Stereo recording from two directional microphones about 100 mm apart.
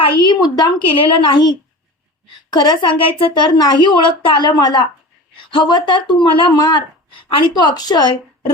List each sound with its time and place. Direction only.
0.3 s speech: 45° left (ahead or behind)
0.9 s a woman's voice: 60° left (ahead or behind)
6.5 s speech: 45° left (ahead or behind)
7.3 s speech: 55° left (ahead or behind)